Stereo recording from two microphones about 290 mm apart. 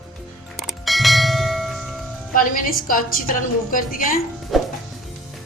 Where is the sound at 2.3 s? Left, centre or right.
Left.